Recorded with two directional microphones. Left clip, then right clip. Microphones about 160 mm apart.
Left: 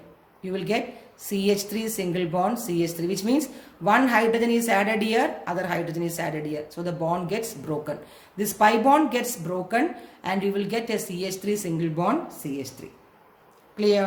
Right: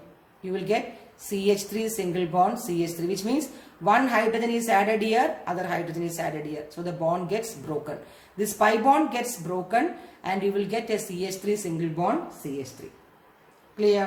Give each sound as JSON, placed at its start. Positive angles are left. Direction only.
{"t": 0.5, "sound": "a woman's voice", "side_deg": 25}
{"t": 13.7, "sound": "a woman's voice", "side_deg": 30}